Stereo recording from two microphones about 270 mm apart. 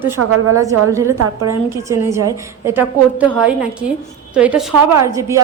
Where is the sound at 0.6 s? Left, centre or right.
Centre.